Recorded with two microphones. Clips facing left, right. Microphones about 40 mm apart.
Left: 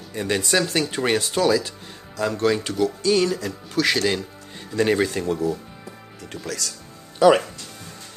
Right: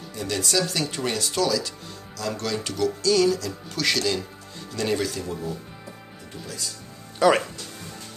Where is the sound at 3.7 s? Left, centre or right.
Centre.